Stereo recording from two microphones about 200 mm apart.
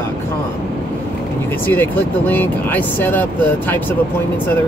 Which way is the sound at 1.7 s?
10° left (ahead or behind).